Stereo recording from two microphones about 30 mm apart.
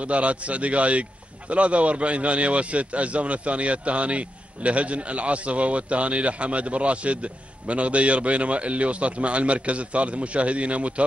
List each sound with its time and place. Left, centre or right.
0.0 s a man's voice: right